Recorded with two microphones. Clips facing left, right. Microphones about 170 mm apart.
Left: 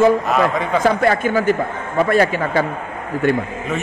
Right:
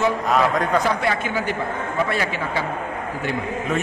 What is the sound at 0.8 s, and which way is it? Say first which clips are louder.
A man's voice: left 6 dB; 50° left (ahead or behind).